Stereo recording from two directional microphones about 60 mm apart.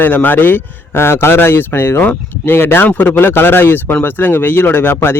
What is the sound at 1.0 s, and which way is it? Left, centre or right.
Speech, left.